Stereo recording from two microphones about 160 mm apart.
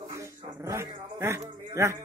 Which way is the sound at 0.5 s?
15° right (ahead or behind).